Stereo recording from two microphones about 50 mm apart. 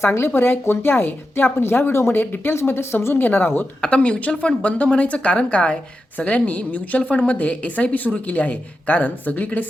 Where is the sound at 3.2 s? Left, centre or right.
Left.